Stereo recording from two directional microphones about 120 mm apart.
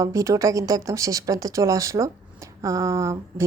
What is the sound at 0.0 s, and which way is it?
Speech, 25° right (ahead or behind).